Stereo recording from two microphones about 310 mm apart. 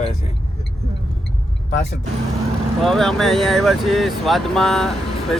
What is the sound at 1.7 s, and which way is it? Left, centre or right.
Speech, left.